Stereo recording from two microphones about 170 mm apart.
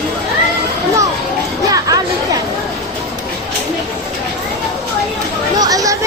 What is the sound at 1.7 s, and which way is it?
Chatter, 20° right (ahead or behind).